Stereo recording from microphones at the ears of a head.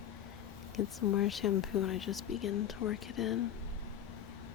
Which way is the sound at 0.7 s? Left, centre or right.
Left.